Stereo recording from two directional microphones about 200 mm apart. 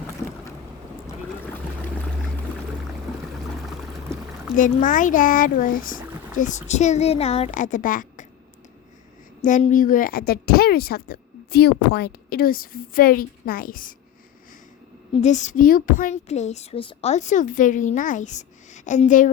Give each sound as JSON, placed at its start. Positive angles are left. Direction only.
{"t": 4.5, "sound": "a woman's voice", "side_deg": 40}
{"t": 9.4, "sound": "a woman's voice", "side_deg": 40}
{"t": 15.2, "sound": "a woman's voice", "side_deg": 35}